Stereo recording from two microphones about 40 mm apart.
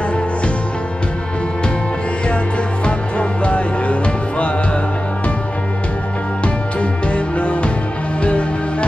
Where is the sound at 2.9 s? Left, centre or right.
Left.